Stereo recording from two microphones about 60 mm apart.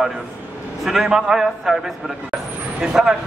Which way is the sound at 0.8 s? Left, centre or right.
Centre.